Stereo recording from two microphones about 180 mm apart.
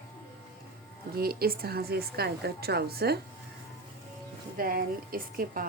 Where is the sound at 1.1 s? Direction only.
55° right (ahead or behind).